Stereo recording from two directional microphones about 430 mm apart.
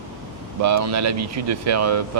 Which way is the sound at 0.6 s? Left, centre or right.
Right.